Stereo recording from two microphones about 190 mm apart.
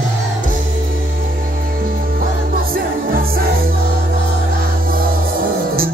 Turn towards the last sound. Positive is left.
turn(degrees=-50)  # may be behind; listen again after turning